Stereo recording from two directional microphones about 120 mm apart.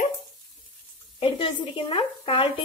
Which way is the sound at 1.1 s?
50° left (ahead or behind).